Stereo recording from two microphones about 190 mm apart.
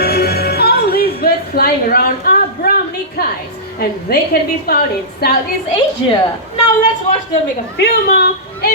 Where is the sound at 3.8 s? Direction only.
55° left (ahead or behind).